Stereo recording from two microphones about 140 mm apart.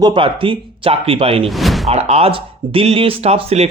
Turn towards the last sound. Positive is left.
turn(degrees=-45)  # may be behind; listen again after turning